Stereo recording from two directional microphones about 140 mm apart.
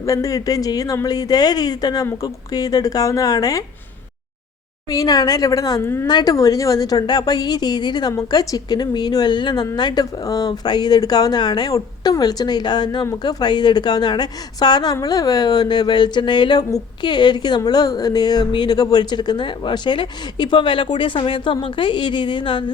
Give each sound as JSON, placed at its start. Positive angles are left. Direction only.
{"t": 0.0, "sound": "speech", "side_deg": 25}
{"t": 4.9, "sound": "speech", "side_deg": 25}
{"t": 6.1, "sound": "speech", "side_deg": 30}